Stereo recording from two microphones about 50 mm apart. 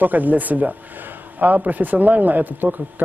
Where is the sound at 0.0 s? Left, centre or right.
Right.